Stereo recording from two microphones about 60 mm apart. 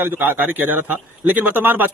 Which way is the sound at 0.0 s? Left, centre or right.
Right.